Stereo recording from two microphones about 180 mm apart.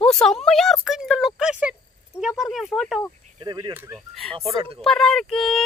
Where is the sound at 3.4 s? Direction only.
25° right (ahead or behind).